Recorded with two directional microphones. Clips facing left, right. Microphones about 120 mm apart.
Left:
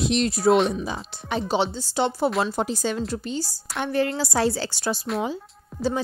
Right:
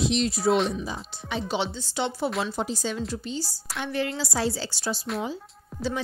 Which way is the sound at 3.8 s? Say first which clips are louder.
Left 5 dB; 45° left (ahead or behind).